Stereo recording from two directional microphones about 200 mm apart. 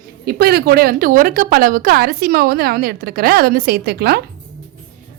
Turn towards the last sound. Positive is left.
turn(degrees=-50)  # may be behind; listen again after turning